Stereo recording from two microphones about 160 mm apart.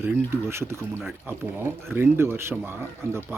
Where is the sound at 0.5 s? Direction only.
15° right (ahead or behind).